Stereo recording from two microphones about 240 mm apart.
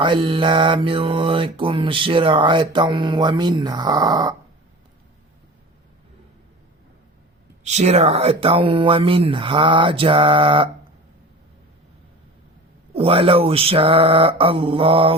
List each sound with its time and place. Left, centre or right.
0.0 s mantra: centre
7.6 s mantra: right
12.9 s mantra: right